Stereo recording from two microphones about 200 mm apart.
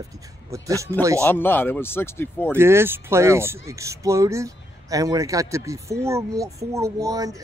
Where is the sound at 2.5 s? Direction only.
10° right (ahead or behind).